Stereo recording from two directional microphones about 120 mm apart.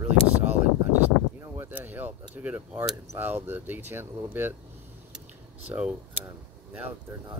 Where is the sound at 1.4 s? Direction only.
15° right (ahead or behind).